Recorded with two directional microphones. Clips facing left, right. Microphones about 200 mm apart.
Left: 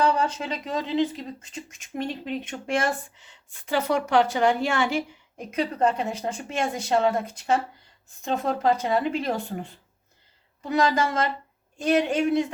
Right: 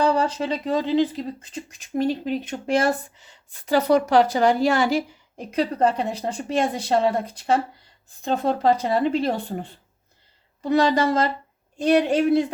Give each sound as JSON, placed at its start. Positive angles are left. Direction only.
{"t": 0.0, "sound": "speech", "side_deg": -35}